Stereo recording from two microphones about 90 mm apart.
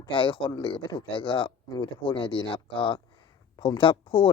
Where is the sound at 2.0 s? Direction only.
70° left (ahead or behind).